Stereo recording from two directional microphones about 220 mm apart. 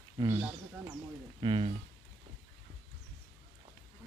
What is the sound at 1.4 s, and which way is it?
Speech, 20° right (ahead or behind).